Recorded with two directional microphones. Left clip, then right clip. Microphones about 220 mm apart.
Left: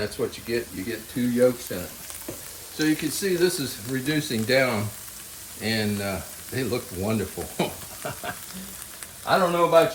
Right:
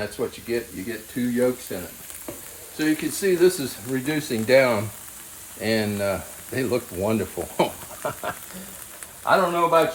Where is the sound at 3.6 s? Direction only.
35° right (ahead or behind).